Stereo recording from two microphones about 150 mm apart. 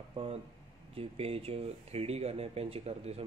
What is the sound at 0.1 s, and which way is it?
A man's voice, 40° right (ahead or behind).